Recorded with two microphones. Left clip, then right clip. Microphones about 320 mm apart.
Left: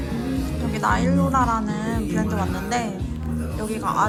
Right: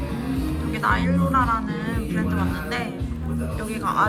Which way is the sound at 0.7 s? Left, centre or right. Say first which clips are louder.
Left 1 dB; centre.